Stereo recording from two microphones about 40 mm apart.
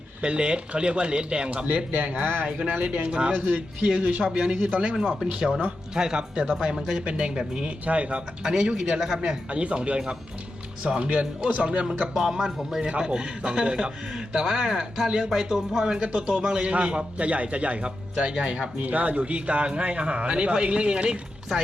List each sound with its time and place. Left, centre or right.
0.2 s a man's voice: right
1.6 s speech: right
2.2 s speech: right
2.7 s a man's voice: right
5.4 s a man's voice: centre
7.0 s a man's voice: right
7.9 s speech: right
8.4 s speech: centre
9.5 s a man's voice: right
12.3 s a man's voice: centre
18.8 s a man's voice: right